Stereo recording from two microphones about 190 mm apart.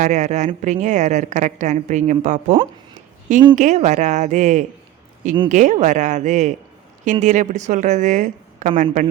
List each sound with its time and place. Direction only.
0.0 s a woman's voice: 40° right (ahead or behind)